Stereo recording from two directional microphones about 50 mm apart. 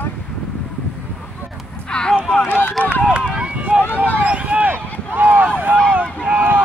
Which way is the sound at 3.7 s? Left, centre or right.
Centre.